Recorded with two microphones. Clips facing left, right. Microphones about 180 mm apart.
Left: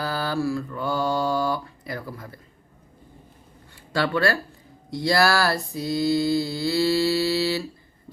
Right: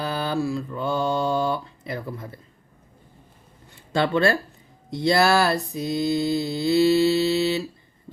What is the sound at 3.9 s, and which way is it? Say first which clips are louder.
Speech: right 2 dB; 25° right (ahead or behind).